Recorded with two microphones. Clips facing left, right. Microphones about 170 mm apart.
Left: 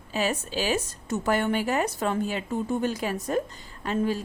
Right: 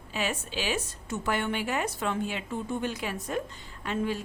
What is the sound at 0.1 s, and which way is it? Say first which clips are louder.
A woman's voice: left 5 dB; 40° left (ahead or behind).